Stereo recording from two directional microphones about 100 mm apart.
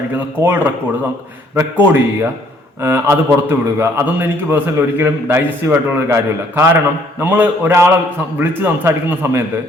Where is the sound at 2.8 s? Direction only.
25° right (ahead or behind).